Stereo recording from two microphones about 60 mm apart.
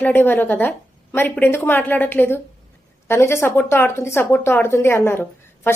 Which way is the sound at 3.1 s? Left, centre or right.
Left.